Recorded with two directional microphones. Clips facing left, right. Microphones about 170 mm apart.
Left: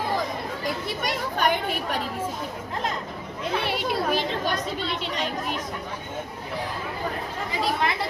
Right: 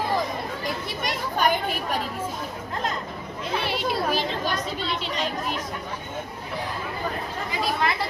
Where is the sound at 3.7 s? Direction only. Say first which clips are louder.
Right 1 dB; 55° left (ahead or behind).